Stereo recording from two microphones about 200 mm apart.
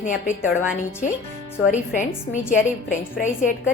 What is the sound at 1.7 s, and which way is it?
A woman's voice, 40° left (ahead or behind).